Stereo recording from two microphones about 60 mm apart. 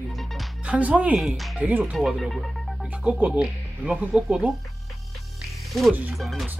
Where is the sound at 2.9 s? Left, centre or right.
Right.